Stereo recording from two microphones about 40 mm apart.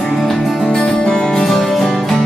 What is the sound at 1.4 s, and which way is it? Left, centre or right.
Music, centre.